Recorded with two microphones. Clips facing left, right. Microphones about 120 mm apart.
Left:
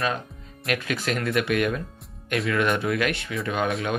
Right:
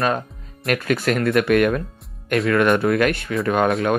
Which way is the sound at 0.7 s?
50° right (ahead or behind).